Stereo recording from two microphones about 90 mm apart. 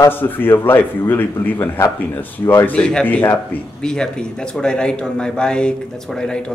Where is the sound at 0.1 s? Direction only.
20° left (ahead or behind).